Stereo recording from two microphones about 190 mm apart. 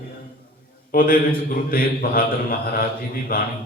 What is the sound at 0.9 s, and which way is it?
Mantra, 45° left (ahead or behind).